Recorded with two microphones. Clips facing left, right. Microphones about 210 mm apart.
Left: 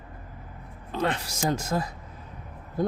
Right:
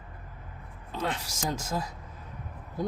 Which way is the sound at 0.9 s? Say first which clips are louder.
Left 5 dB; 65° left (ahead or behind).